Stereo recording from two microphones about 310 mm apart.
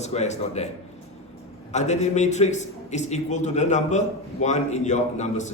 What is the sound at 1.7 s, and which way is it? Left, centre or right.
A man's voice, left.